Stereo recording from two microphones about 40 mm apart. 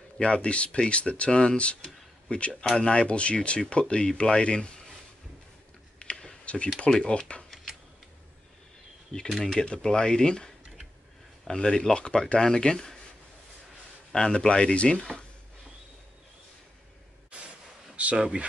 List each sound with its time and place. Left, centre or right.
0.2 s speech: left
5.9 s computer keyboard: left
6.9 s speech: centre
9.4 s speech: centre
11.5 s speech: left
14.1 s speech: centre
18.1 s speech: right